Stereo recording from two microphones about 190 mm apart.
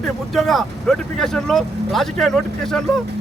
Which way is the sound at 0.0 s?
Centre (ahead or behind).